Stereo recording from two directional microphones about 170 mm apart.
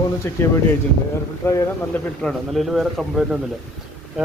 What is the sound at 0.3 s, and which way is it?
Speech, 15° left (ahead or behind).